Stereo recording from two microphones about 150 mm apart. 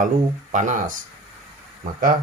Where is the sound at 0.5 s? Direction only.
60° right (ahead or behind).